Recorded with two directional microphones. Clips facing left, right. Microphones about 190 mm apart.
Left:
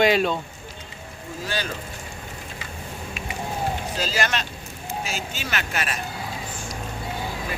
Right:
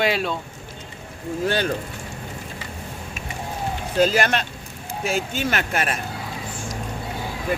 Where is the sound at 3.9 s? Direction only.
55° right (ahead or behind).